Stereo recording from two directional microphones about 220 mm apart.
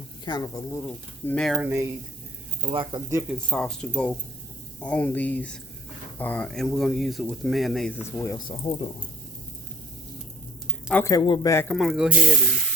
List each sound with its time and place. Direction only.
0.3 s speech: 15° left (ahead or behind)
1.3 s speech: centre (ahead or behind)
2.6 s speech: 20° right (ahead or behind)
3.2 s speech: 5° left (ahead or behind)
8.4 s speech: 20° left (ahead or behind)
10.8 s speech: 10° left (ahead or behind)
11.8 s speech: centre (ahead or behind)